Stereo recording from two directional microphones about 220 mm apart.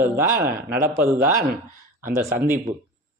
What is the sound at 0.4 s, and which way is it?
Speech, 40° right (ahead or behind).